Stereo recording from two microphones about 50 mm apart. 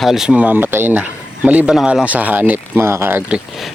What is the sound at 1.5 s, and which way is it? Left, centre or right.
Speech, right.